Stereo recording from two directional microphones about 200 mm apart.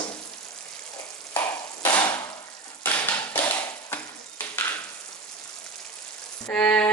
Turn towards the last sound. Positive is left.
turn(degrees=5)  # may be behind; listen again after turning